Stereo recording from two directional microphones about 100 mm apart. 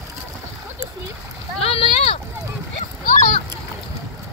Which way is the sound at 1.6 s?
70° left (ahead or behind).